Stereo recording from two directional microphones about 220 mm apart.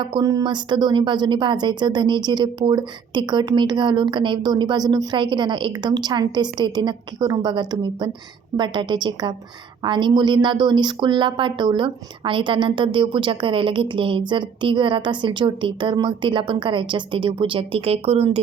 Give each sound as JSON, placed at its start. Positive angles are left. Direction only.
{"t": 0.0, "sound": "speech", "side_deg": -20}